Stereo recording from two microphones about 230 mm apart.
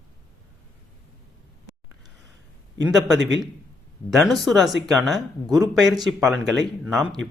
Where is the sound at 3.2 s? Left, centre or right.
Right.